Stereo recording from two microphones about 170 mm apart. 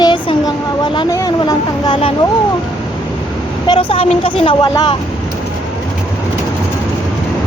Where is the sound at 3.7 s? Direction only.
35° left (ahead or behind).